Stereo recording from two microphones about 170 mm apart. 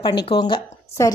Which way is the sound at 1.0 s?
15° left (ahead or behind).